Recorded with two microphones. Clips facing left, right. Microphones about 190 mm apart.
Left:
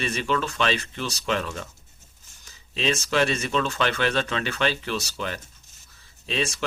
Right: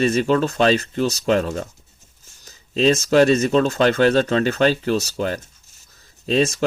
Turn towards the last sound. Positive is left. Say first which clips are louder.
# right 9 dB
turn(degrees=-40)  # may be behind; listen again after turning